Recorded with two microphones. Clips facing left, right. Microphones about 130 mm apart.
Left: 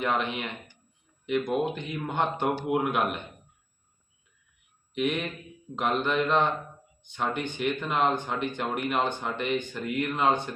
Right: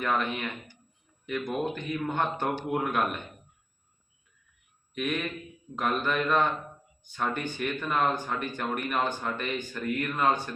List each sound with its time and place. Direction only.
0.0 s speech: 20° left (ahead or behind)
4.9 s speech: 20° left (ahead or behind)